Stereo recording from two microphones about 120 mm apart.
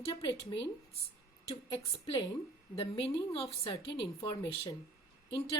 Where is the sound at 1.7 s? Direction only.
45° left (ahead or behind).